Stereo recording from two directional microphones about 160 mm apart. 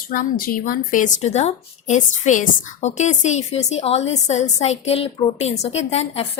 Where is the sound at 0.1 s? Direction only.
65° left (ahead or behind).